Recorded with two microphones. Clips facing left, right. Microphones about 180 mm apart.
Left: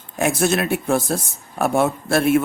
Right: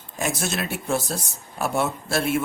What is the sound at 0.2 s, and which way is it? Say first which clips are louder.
Speech: left 8 dB; 55° left (ahead or behind).